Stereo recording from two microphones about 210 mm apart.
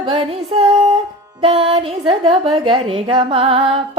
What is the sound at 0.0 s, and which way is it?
A woman's voice, 25° right (ahead or behind).